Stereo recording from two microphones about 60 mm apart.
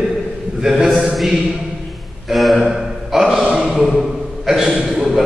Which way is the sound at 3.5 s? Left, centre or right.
Centre.